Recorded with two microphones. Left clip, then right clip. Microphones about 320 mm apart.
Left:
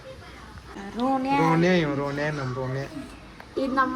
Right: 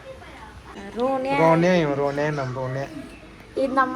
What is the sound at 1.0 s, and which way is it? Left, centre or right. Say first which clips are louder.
Speech: right 1 dB; centre.